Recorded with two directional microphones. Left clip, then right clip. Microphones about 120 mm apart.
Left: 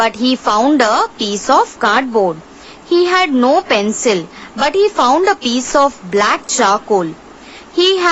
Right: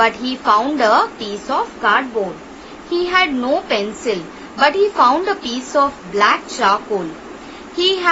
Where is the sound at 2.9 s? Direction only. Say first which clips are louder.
Left 4 dB; 60° left (ahead or behind).